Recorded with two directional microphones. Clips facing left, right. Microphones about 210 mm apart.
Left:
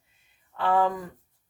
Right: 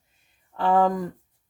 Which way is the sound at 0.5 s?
40° right (ahead or behind).